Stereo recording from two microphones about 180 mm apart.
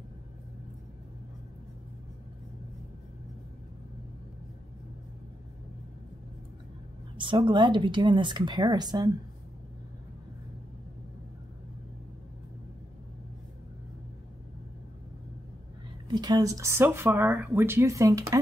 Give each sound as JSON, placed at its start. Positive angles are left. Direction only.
{"t": 7.2, "sound": "speech", "side_deg": -25}
{"t": 16.1, "sound": "speech", "side_deg": -20}